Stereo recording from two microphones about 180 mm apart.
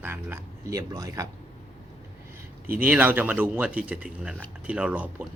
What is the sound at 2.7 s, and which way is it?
Speech, 10° right (ahead or behind).